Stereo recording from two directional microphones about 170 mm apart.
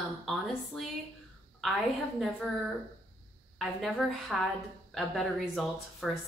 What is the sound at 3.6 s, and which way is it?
A woman's voice, centre (ahead or behind).